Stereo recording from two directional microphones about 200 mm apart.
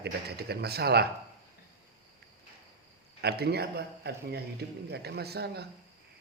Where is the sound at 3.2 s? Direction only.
55° right (ahead or behind).